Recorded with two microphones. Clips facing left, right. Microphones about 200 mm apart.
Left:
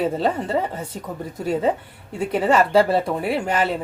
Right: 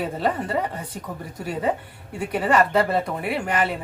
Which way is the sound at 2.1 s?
25° left (ahead or behind).